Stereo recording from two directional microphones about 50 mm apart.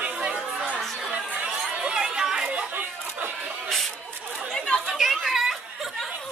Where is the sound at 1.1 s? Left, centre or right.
Right.